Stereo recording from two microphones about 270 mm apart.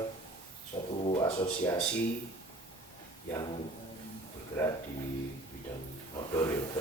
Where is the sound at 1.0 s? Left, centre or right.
Centre.